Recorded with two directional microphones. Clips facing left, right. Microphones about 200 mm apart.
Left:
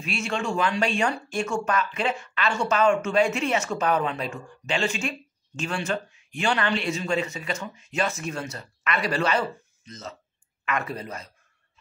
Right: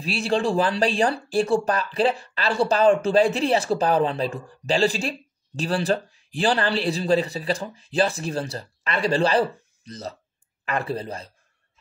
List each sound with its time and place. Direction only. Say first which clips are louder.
0.0 s speech: right 6 dB; 35° right (ahead or behind)